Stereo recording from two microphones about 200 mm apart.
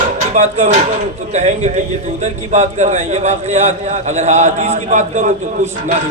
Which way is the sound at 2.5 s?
35° right (ahead or behind).